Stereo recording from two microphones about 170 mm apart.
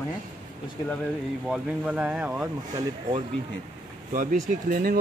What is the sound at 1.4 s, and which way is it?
Speech, 5° right (ahead or behind).